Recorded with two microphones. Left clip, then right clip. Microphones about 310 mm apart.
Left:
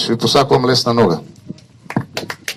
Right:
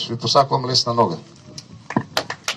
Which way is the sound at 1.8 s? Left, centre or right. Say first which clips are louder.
Even; left.